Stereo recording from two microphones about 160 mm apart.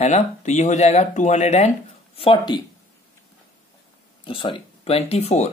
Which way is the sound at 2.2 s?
30° left (ahead or behind).